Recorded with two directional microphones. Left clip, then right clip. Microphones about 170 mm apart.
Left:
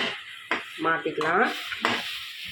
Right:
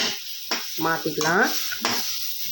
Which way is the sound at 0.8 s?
45° right (ahead or behind).